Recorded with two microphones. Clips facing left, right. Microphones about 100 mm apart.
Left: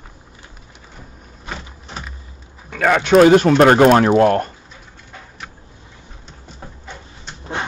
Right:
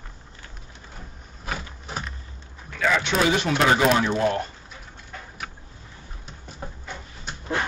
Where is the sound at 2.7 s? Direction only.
60° left (ahead or behind).